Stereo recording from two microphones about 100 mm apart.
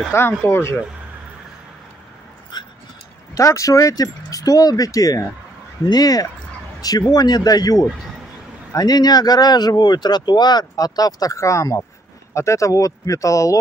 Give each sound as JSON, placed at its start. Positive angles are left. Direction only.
{"t": 0.1, "sound": "speech", "side_deg": 25}
{"t": 2.5, "sound": "dog", "side_deg": 45}
{"t": 3.3, "sound": "speech", "side_deg": 30}